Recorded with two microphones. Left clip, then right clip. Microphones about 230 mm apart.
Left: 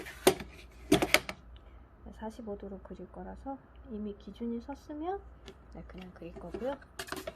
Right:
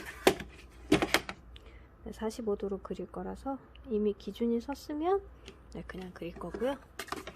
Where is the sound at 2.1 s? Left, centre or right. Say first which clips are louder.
Right 7 dB; right.